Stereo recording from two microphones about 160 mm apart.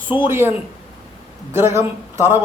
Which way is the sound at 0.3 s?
15° right (ahead or behind).